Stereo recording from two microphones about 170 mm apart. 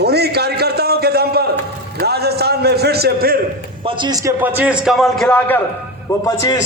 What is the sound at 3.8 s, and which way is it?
A man's voice, 25° right (ahead or behind).